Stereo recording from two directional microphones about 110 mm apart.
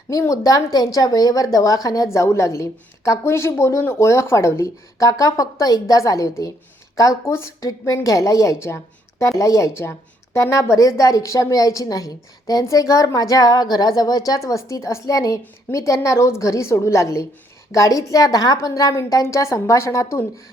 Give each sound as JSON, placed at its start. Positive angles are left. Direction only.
{"t": 0.1, "sound": "a woman's voice", "side_deg": 30}